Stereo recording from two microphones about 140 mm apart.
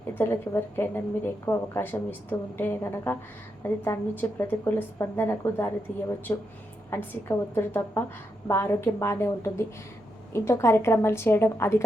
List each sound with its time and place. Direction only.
0.1 s a woman's voice: 15° left (ahead or behind)